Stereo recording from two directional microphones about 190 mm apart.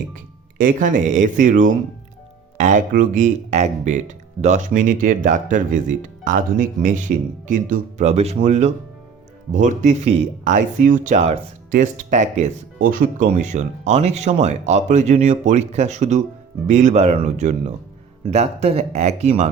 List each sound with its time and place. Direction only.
0.6 s speech: 45° right (ahead or behind)